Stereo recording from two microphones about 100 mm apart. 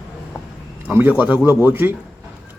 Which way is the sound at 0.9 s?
15° right (ahead or behind).